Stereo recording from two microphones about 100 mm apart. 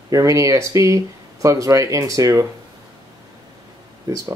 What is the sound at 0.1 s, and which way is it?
Speech, 30° right (ahead or behind).